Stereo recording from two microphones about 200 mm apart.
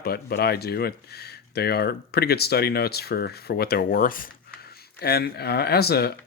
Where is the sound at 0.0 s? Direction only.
50° left (ahead or behind).